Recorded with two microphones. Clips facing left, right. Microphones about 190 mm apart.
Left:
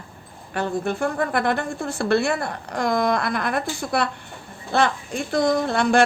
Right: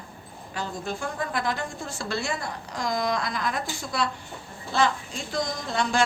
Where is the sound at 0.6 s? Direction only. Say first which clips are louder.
Left 8 dB; 60° left (ahead or behind).